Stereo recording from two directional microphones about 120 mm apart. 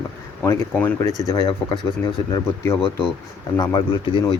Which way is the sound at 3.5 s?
35° left (ahead or behind).